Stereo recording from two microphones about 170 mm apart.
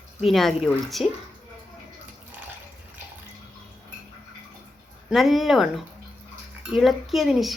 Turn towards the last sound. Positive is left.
turn(degrees=0)  # may be behind; listen again after turning